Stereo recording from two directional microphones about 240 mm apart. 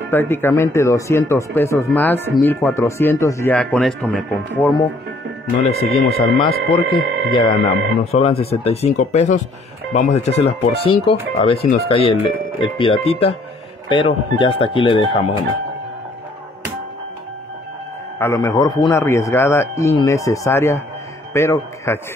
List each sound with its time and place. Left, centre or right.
0.1 s speech: centre
5.7 s speech: left
18.2 s a man's voice: centre